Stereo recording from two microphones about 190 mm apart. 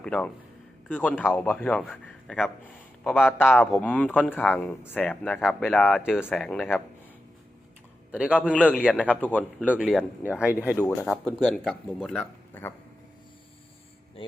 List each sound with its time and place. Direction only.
0.0 s a man's voice: 5° left (ahead or behind)
8.1 s speech: 5° right (ahead or behind)
8.4 s speech: 5° left (ahead or behind)
9.7 s speech: 5° right (ahead or behind)
10.8 s speech: 10° left (ahead or behind)
14.2 s speech: 30° left (ahead or behind)